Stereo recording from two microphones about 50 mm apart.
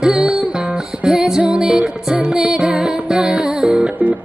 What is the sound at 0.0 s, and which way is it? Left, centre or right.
Music, centre.